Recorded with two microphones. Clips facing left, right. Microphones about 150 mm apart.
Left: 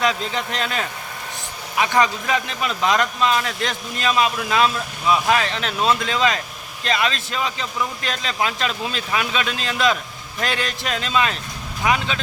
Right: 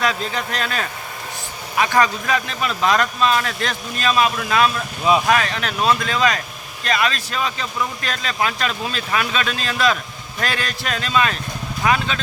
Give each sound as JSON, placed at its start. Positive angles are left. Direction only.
{"t": 0.0, "sound": "speech", "side_deg": 20}